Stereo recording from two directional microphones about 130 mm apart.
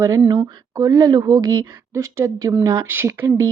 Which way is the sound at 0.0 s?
25° right (ahead or behind).